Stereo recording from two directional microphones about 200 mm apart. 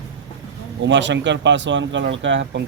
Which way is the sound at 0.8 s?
65° right (ahead or behind).